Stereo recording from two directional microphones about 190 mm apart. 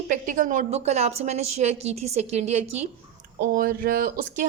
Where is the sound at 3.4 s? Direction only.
50° right (ahead or behind).